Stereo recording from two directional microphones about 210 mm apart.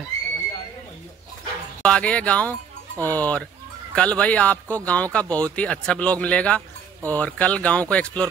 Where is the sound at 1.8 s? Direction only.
5° left (ahead or behind).